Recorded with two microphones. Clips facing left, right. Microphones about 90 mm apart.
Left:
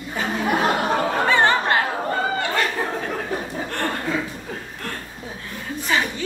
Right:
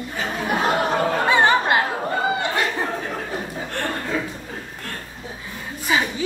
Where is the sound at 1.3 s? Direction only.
15° right (ahead or behind).